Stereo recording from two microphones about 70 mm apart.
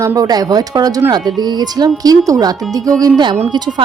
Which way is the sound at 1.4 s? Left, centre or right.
Right.